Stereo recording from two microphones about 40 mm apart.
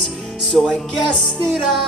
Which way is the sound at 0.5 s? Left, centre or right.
Centre.